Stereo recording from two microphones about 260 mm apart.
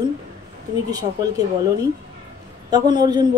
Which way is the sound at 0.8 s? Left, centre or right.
Centre.